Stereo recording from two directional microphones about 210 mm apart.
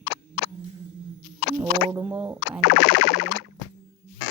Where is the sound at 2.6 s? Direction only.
50° left (ahead or behind).